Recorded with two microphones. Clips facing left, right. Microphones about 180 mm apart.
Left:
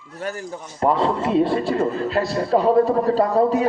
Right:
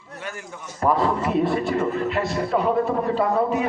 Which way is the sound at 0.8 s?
25° left (ahead or behind).